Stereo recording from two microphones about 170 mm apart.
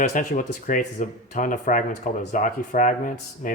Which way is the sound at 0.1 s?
50° left (ahead or behind).